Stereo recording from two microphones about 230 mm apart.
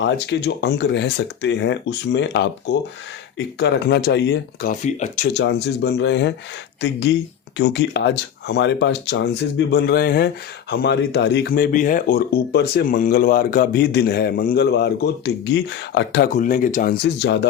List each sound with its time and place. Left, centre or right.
0.0 s speech: left
4.7 s speech: left
5.3 s speech: left